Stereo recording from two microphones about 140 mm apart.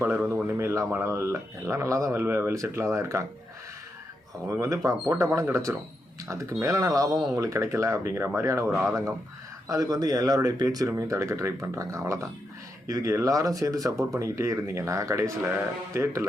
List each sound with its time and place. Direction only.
0.0 s speech: 10° right (ahead or behind)
4.6 s speech: 20° right (ahead or behind)
8.7 s speech: centre (ahead or behind)
9.6 s speech: 25° right (ahead or behind)